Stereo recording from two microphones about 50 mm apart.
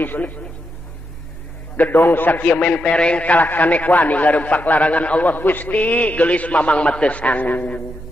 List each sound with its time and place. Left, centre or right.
0.0 s a man's voice: left
1.8 s a man's voice: left